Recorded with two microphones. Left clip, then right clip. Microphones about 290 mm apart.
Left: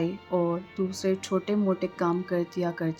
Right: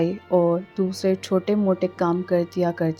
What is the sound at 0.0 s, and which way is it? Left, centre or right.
A woman's voice, centre.